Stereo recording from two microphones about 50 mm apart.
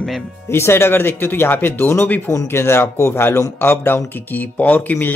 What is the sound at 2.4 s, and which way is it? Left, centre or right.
A man's voice, left.